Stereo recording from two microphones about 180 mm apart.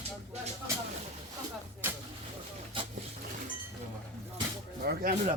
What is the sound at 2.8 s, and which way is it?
Vehicle, 25° right (ahead or behind).